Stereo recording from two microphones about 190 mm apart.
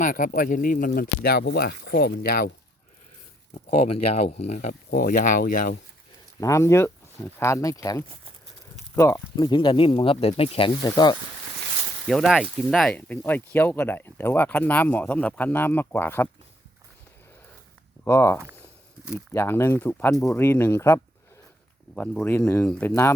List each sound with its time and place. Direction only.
0.0 s speech: 45° left (ahead or behind)
3.5 s speech: 30° left (ahead or behind)
4.9 s speech: 50° left (ahead or behind)
6.4 s speech: 15° left (ahead or behind)
12.0 s speech: centre (ahead or behind)
18.0 s speech: 15° left (ahead or behind)